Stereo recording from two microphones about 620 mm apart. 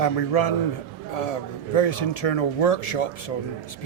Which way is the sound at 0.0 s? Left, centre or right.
Left.